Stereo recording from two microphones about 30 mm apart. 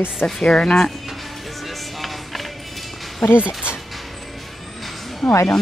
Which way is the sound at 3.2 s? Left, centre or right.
Left.